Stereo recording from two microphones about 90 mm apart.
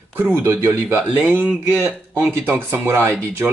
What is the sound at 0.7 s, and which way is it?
Speech, 25° right (ahead or behind).